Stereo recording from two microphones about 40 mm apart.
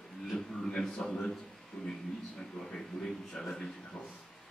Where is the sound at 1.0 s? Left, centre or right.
Centre.